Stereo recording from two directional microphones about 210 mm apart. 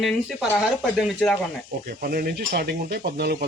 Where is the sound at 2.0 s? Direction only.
45° right (ahead or behind).